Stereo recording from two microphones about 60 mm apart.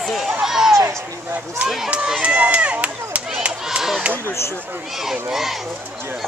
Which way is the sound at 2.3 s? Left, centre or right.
Right.